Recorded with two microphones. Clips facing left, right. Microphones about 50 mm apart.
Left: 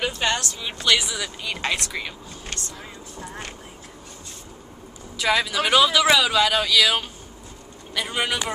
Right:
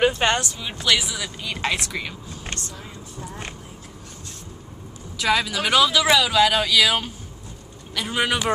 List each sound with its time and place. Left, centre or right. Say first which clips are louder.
0.0 s a sound: right 5 dB; right
0.4 s speech: right 1 dB; centre
5.1 s speech: even; centre